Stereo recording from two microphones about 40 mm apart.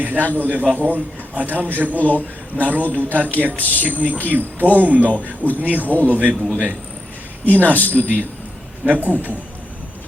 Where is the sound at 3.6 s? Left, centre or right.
Left.